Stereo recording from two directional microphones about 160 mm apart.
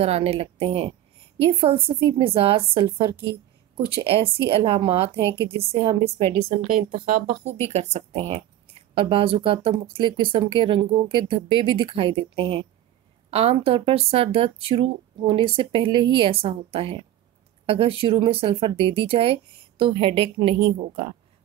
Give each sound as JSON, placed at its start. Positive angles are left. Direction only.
{"t": 0.0, "sound": "speech", "side_deg": -40}
{"t": 3.9, "sound": "speech", "side_deg": -35}
{"t": 6.4, "sound": "a woman's voice", "side_deg": -60}
{"t": 7.6, "sound": "speech", "side_deg": -40}